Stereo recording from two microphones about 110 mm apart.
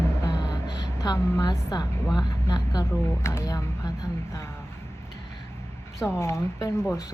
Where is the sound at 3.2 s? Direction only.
25° left (ahead or behind).